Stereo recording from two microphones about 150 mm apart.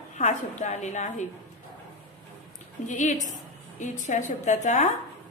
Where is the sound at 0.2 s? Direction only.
50° left (ahead or behind).